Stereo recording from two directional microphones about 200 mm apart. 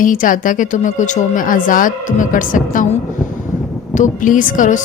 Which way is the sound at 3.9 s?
40° left (ahead or behind).